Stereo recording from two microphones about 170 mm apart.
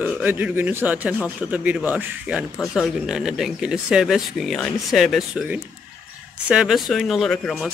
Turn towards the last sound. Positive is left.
turn(degrees=0)  # may be behind; listen again after turning